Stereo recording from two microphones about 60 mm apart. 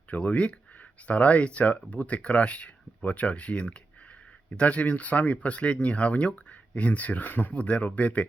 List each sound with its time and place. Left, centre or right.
0.1 s speech: left